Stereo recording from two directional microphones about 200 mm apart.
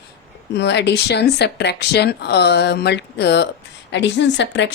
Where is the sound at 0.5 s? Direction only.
60° left (ahead or behind).